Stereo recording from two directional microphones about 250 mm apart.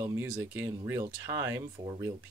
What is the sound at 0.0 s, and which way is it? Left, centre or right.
Speech, centre.